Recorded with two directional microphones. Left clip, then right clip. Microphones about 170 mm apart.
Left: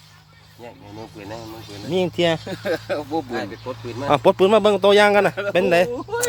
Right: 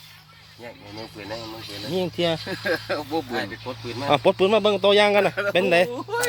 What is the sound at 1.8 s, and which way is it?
Speech, 15° left (ahead or behind).